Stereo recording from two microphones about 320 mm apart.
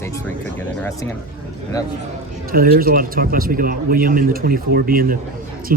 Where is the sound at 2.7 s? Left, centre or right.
Right.